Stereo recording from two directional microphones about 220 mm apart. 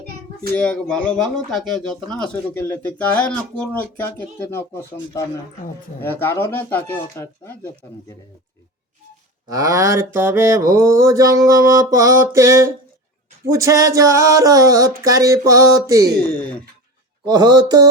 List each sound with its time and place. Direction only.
0.5 s speech: 5° left (ahead or behind)
9.5 s mantra: 15° right (ahead or behind)
17.2 s speech: 20° right (ahead or behind)